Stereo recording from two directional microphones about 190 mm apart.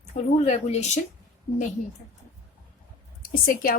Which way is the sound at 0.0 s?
40° left (ahead or behind).